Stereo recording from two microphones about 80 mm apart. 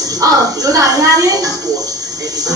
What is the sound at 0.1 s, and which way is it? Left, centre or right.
Speech, right.